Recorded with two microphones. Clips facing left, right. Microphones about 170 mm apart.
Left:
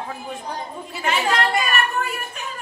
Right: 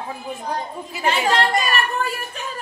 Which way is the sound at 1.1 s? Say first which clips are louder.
Right 2 dB; 30° right (ahead or behind).